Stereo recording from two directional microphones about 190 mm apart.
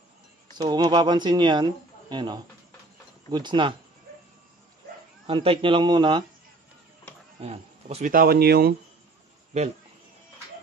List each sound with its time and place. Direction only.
0.6 s speech: 20° right (ahead or behind)
5.2 s speech: 30° right (ahead or behind)
7.3 s speech: 30° right (ahead or behind)
8.1 s speech: 50° right (ahead or behind)
9.5 s a man's voice: 35° right (ahead or behind)